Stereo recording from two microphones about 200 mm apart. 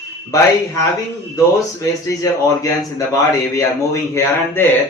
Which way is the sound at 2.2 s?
15° left (ahead or behind).